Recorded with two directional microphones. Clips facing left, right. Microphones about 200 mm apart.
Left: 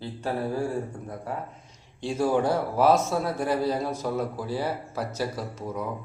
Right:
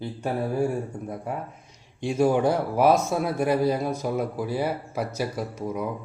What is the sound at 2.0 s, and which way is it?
A man's voice, 15° right (ahead or behind).